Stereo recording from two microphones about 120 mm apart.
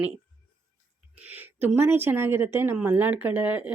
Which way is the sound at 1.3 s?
15° right (ahead or behind).